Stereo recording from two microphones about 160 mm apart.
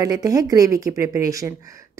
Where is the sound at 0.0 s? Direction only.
25° right (ahead or behind).